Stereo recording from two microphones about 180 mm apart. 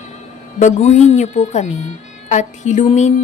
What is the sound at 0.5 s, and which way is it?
A woman's voice, 40° left (ahead or behind).